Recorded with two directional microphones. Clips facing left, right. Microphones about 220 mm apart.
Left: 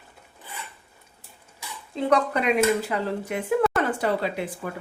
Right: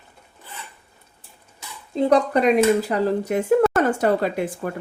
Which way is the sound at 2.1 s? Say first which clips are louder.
Right 4 dB; 35° right (ahead or behind).